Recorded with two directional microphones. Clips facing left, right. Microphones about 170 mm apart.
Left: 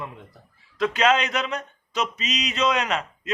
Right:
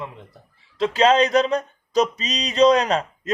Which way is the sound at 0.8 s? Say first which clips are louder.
Right 4 dB; 30° right (ahead or behind).